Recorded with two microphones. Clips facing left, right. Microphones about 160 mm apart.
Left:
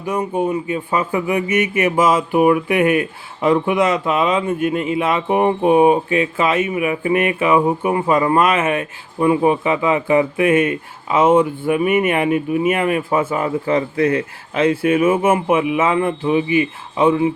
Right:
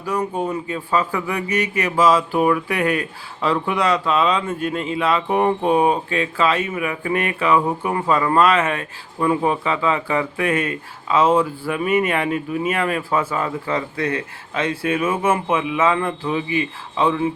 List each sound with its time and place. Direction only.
0.0 s speech: 15° left (ahead or behind)